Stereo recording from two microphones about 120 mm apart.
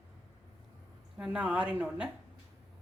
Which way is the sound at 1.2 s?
5° right (ahead or behind).